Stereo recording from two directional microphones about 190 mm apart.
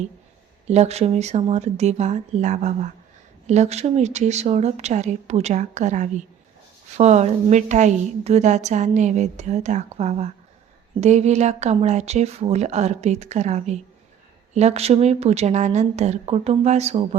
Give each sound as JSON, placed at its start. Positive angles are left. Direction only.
{"t": 0.7, "sound": "a woman's voice", "side_deg": -35}